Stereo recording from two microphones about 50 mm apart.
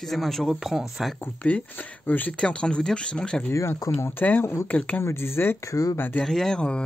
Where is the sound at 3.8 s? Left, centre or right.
Left.